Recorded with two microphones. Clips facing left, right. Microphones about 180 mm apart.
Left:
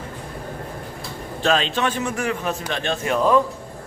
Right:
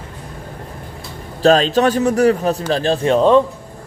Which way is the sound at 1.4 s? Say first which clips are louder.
Right 8 dB; 40° right (ahead or behind).